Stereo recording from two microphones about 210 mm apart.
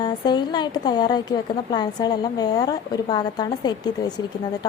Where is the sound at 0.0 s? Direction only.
20° left (ahead or behind).